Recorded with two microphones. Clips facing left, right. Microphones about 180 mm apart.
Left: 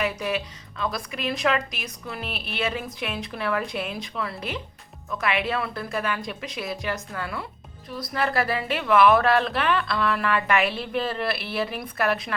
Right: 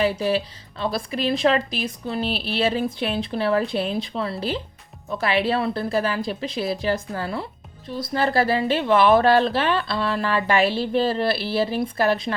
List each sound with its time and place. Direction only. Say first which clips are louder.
0.0 s speech: right 6 dB; 30° right (ahead or behind)